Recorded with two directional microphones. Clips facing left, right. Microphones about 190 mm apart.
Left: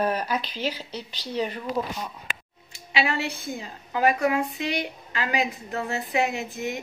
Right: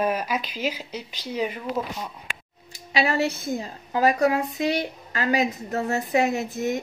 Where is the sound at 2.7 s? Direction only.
40° right (ahead or behind).